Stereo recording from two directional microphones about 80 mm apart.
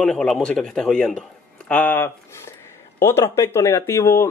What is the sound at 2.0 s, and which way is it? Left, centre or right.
Speech, left.